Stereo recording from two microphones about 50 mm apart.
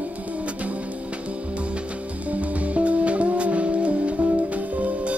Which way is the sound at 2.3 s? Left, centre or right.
Right.